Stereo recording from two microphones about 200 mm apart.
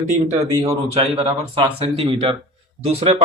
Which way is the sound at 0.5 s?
15° right (ahead or behind).